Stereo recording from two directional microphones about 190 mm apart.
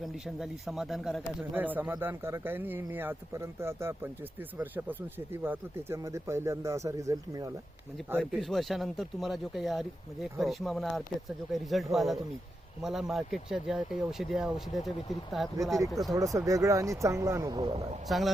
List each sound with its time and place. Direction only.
0.0 s speech: centre (ahead or behind); by 7.5 s 20° right (ahead or behind)
8.2 s speech: centre (ahead or behind)
16.1 s speech: 15° right (ahead or behind)
18.1 s speech: centre (ahead or behind)